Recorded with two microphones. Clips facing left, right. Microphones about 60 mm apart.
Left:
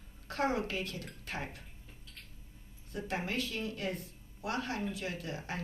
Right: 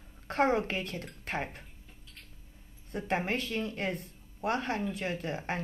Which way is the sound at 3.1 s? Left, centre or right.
Right.